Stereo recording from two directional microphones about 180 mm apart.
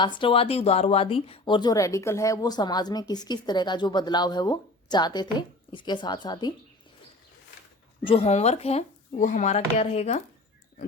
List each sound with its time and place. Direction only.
0.0 s speech: 25° left (ahead or behind)
8.0 s speech: 35° left (ahead or behind)
9.1 s speech: 45° left (ahead or behind)